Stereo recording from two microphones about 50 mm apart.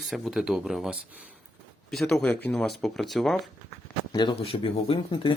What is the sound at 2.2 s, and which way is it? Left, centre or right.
Speech, left.